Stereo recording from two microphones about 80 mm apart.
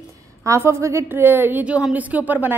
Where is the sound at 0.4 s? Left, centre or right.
Right.